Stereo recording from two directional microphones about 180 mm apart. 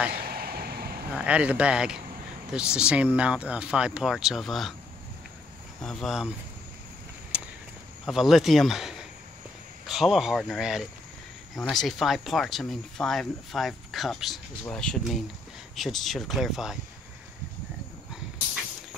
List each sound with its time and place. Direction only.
0.1 s vehicle: 55° right (ahead or behind)
1.1 s speech: 5° right (ahead or behind)
5.8 s speech: 5° left (ahead or behind)
8.0 s speech: centre (ahead or behind)